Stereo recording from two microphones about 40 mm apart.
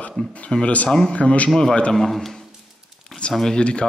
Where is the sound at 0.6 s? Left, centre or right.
Left.